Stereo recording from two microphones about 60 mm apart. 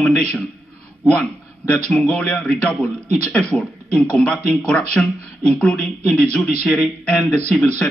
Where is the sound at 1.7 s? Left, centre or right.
Centre.